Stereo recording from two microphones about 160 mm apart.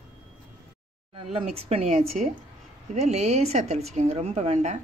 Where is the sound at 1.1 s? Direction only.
35° right (ahead or behind).